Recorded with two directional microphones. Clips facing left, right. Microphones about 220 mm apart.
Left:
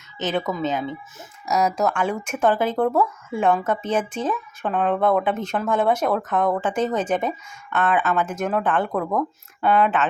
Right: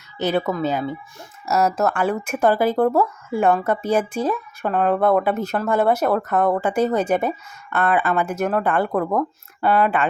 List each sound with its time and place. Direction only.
0.2 s speech: 10° right (ahead or behind)